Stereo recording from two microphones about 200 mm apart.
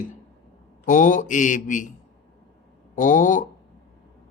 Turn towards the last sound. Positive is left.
turn(degrees=40)  # may be behind; listen again after turning